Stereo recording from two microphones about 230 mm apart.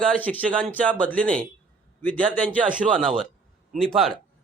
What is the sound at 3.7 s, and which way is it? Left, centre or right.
Speech, centre.